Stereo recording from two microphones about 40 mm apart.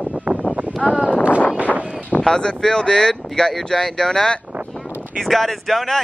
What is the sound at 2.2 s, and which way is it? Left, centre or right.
Speech, centre.